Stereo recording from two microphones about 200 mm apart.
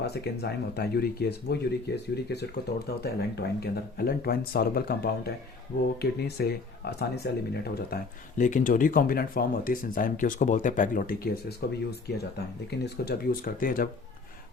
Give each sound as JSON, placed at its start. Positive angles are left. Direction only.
{"t": 0.0, "sound": "speech", "side_deg": 55}
{"t": 8.4, "sound": "speech", "side_deg": 40}